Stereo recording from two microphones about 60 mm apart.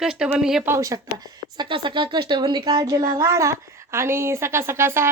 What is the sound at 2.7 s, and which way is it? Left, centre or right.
A woman's voice, right.